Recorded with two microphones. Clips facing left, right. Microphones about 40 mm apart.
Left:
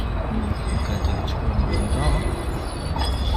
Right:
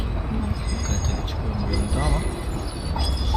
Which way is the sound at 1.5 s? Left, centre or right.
Left.